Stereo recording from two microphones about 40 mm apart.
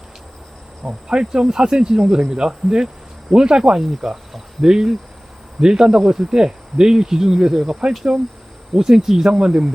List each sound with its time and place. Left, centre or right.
0.9 s speech: centre